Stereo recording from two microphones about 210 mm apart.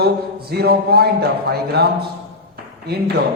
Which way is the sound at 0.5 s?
50° right (ahead or behind).